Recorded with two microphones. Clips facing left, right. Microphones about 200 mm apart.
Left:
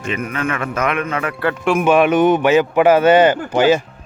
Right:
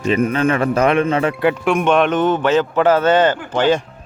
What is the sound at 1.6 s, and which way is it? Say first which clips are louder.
A man's voice: left 4 dB; centre (ahead or behind).